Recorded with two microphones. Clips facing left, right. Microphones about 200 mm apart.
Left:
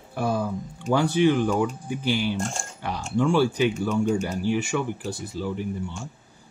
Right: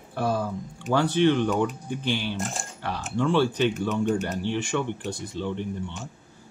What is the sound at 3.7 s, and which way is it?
Speech, centre (ahead or behind).